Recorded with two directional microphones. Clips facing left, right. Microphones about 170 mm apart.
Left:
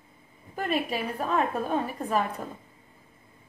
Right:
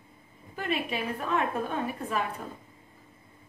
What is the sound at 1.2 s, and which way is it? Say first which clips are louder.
Speech: left 3 dB; 35° left (ahead or behind).